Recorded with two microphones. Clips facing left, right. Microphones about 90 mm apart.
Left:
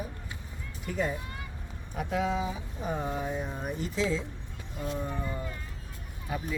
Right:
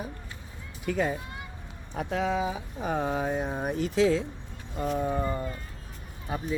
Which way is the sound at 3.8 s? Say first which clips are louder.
Right 7 dB; 65° right (ahead or behind).